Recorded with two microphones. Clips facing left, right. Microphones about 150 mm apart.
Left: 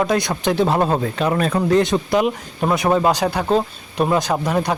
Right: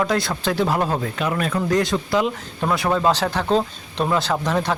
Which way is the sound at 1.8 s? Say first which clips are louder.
Left 3 dB; 20° left (ahead or behind).